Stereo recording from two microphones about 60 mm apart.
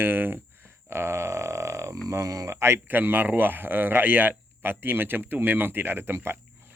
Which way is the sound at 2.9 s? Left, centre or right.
Right.